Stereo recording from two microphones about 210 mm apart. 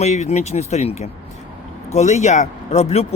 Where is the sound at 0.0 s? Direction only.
35° left (ahead or behind).